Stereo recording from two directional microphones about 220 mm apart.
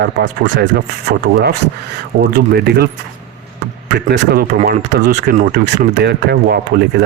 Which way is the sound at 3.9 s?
50° right (ahead or behind).